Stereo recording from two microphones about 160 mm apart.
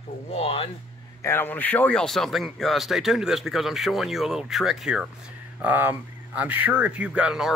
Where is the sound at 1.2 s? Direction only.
15° left (ahead or behind).